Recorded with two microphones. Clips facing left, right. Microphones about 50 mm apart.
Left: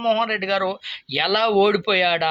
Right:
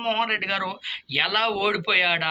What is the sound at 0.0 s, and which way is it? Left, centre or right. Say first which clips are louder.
Speech: left 4 dB; right.